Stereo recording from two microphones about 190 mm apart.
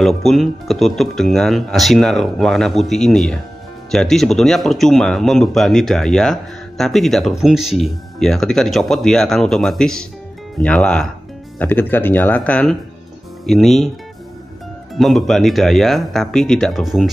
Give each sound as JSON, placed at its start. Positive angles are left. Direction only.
{"t": 0.0, "sound": "speech", "side_deg": 0}
{"t": 15.0, "sound": "speech", "side_deg": 0}